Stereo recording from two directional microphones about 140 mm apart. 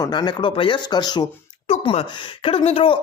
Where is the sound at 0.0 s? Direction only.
30° left (ahead or behind).